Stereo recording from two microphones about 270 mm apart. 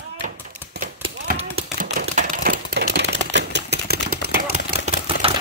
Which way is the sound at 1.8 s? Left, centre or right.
Right.